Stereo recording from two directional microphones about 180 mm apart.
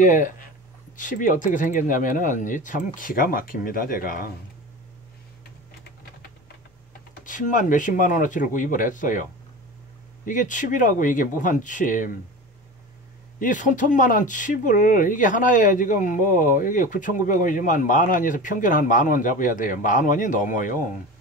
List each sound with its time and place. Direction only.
0.0 s speech: 45° left (ahead or behind)
7.2 s speech: 45° left (ahead or behind)
13.4 s speech: 45° left (ahead or behind)